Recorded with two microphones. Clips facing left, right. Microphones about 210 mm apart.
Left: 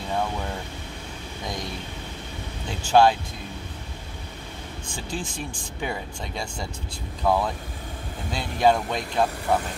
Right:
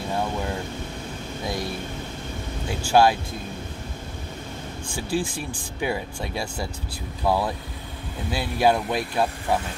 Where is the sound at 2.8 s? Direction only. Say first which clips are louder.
Even; 10° right (ahead or behind).